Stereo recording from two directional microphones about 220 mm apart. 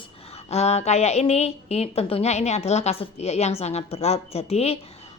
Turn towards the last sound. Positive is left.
turn(degrees=25)  # may be behind; listen again after turning